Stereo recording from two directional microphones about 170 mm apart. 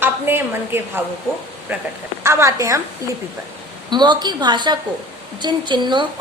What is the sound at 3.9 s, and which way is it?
A woman's voice, 25° right (ahead or behind).